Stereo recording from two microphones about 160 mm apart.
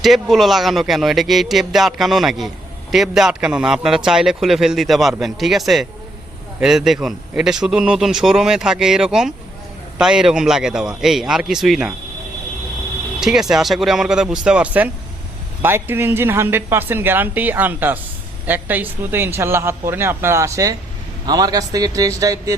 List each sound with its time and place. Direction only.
0.0 s a man's voice: centre (ahead or behind)
13.1 s a man's voice: 5° right (ahead or behind); by 22.5 s 20° right (ahead or behind)